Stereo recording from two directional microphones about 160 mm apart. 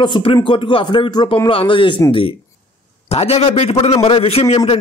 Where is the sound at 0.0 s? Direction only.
30° left (ahead or behind).